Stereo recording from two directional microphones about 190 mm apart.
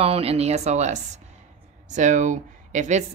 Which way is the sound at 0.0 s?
30° right (ahead or behind).